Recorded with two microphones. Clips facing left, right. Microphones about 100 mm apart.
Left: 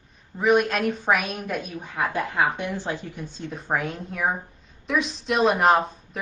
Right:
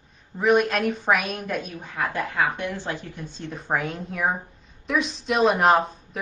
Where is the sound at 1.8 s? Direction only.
15° left (ahead or behind).